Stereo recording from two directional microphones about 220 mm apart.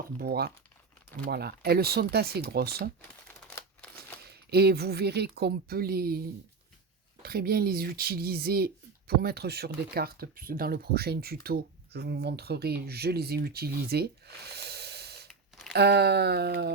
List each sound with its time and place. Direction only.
0.2 s speech: 45° right (ahead or behind)
4.2 s speech: 45° right (ahead or behind)
15.3 s a sound: centre (ahead or behind)
15.7 s speech: 50° right (ahead or behind)